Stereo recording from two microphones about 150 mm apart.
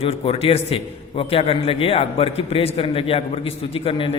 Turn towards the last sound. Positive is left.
turn(degrees=35)  # may be behind; listen again after turning